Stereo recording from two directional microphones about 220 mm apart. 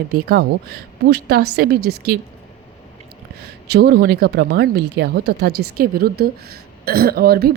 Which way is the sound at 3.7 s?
45° right (ahead or behind).